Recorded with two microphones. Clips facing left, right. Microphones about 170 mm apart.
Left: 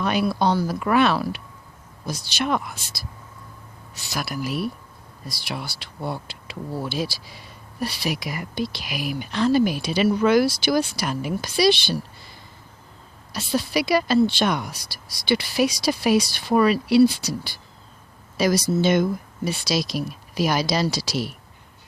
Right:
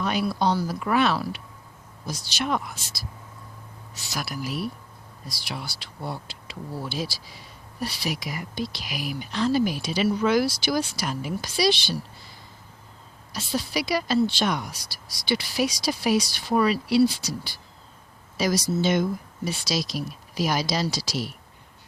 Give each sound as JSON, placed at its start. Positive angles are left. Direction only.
{"t": 0.0, "sound": "speech", "side_deg": 65}
{"t": 13.3, "sound": "speech", "side_deg": 60}